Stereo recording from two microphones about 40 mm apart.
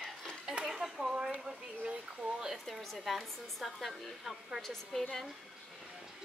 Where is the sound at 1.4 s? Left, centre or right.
Right.